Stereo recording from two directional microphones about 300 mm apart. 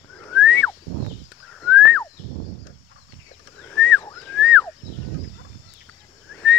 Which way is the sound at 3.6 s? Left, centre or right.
Centre.